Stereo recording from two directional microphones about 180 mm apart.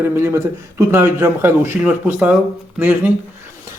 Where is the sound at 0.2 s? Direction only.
15° right (ahead or behind).